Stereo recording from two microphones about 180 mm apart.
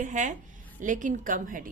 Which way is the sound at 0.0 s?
45° right (ahead or behind).